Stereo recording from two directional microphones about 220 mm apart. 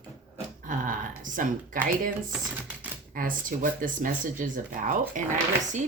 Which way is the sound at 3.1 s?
35° right (ahead or behind).